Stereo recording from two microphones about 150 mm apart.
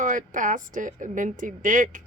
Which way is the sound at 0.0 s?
60° right (ahead or behind).